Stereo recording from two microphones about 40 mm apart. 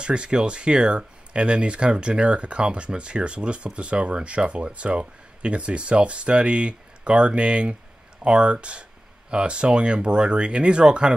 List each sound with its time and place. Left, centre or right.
0.0 s speech: right